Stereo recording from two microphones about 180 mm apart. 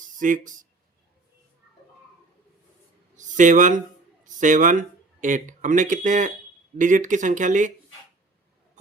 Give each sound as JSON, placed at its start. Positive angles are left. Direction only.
{"t": 0.2, "sound": "speech", "side_deg": -45}
{"t": 3.2, "sound": "speech", "side_deg": -45}